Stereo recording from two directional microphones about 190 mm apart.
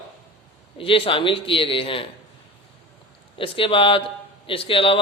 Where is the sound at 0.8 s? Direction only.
30° left (ahead or behind).